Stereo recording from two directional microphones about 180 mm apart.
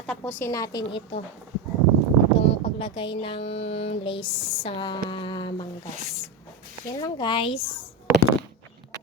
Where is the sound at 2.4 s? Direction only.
30° left (ahead or behind).